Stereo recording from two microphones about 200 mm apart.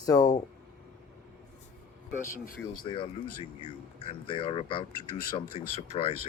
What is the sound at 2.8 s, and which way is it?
Speech, 25° left (ahead or behind).